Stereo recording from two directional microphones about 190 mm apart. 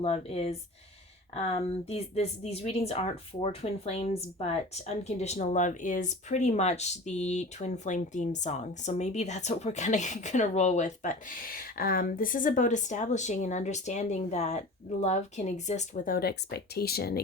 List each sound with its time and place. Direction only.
0.0 s speech: 35° left (ahead or behind); by 17.2 s 55° left (ahead or behind)